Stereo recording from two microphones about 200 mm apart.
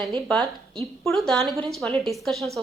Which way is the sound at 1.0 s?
Centre (ahead or behind).